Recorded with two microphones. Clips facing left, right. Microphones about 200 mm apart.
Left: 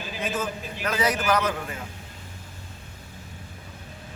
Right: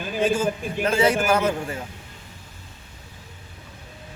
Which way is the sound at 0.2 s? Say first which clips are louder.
Right 8 dB; 30° right (ahead or behind).